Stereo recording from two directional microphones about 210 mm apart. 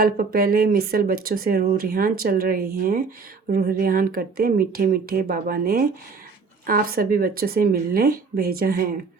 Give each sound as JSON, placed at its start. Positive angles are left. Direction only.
{"t": 0.0, "sound": "speech", "side_deg": -45}